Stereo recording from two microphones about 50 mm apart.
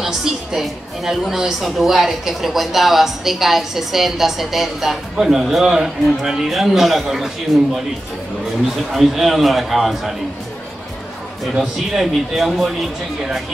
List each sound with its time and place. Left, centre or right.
0.0 s a woman's voice: centre
8.9 s a woman's voice: centre
11.6 s a woman's voice: centre